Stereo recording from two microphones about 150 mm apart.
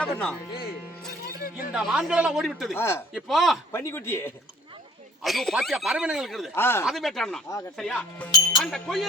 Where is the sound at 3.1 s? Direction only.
Centre (ahead or behind).